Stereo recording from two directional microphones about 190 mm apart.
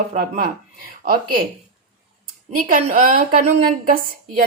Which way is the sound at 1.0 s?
50° right (ahead or behind).